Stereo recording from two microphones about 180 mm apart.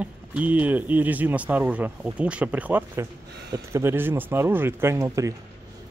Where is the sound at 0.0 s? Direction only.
10° right (ahead or behind).